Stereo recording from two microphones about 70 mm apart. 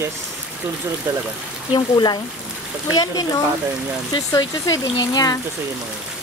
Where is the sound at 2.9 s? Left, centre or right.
Left.